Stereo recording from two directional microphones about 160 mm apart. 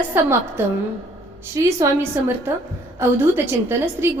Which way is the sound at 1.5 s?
20° right (ahead or behind).